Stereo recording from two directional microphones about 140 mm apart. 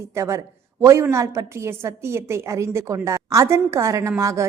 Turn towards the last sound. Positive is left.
turn(degrees=-20)  # may be behind; listen again after turning